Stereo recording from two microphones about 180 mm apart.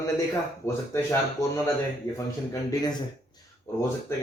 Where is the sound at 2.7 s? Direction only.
20° left (ahead or behind).